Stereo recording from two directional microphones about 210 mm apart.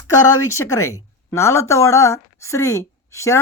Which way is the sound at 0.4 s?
15° left (ahead or behind).